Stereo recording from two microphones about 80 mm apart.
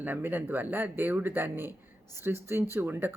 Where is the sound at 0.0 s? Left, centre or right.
Right.